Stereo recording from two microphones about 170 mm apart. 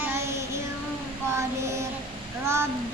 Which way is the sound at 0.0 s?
15° right (ahead or behind).